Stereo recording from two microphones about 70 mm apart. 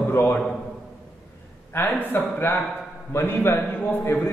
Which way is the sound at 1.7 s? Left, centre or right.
Left.